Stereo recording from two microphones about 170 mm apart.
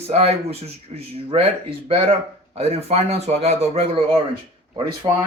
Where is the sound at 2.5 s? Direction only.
35° right (ahead or behind).